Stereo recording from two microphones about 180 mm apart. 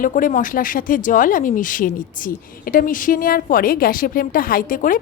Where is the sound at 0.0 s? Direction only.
45° left (ahead or behind).